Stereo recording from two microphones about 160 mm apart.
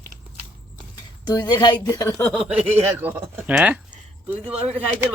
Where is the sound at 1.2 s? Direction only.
25° left (ahead or behind).